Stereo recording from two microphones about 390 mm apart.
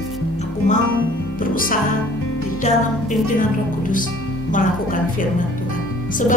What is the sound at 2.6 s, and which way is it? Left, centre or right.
Music, centre.